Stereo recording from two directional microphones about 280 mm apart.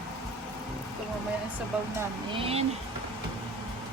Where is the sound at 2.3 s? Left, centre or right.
Centre.